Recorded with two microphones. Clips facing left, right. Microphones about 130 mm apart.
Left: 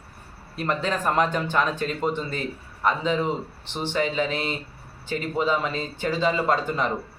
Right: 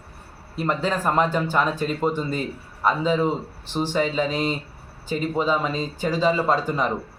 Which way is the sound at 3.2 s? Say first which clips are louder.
Right 3 dB; 40° right (ahead or behind).